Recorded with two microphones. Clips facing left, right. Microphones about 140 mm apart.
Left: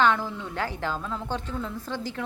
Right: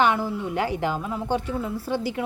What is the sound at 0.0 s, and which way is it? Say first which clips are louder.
A man's voice: right 2 dB; 10° right (ahead or behind).